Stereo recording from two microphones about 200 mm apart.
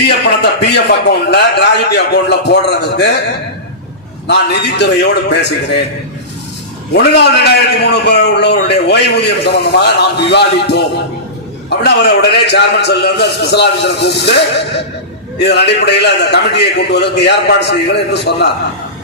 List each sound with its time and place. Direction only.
0.6 s a man's voice: 55° left (ahead or behind)
4.3 s a man's voice: 55° left (ahead or behind)
6.9 s a man's voice: 55° left (ahead or behind)